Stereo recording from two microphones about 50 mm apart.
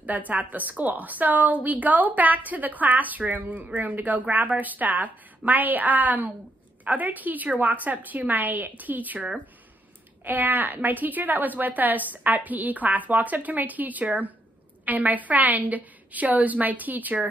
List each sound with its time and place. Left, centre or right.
0.0 s a woman's voice: right
10.2 s a woman's voice: right